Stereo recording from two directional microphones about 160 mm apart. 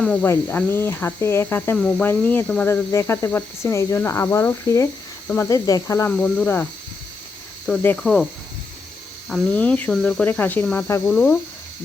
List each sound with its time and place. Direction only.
0.0 s speech: 10° left (ahead or behind)
6.1 s speech: 10° left (ahead or behind)
7.7 s speech: 5° left (ahead or behind)
9.3 s speech: 10° left (ahead or behind)